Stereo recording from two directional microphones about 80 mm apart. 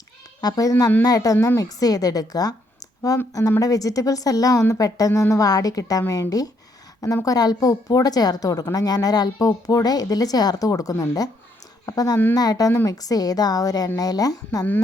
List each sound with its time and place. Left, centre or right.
0.4 s a woman's voice: left